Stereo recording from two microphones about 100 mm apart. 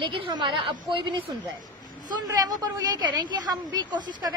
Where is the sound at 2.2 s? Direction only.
40° right (ahead or behind).